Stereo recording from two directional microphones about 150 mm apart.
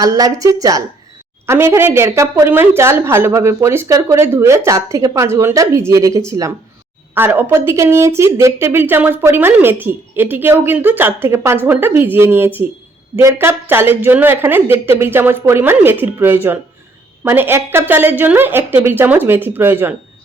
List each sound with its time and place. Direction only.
0.0 s a woman's voice: 25° right (ahead or behind)